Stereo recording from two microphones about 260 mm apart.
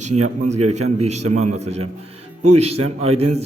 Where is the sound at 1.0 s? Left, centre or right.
Right.